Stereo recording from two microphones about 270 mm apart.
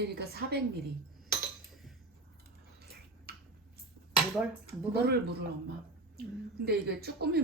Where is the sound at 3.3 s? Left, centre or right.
Right.